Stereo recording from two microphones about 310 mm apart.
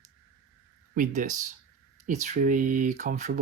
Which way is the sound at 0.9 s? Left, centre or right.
Right.